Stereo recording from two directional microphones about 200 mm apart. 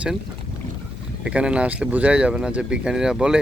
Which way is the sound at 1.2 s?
5° right (ahead or behind).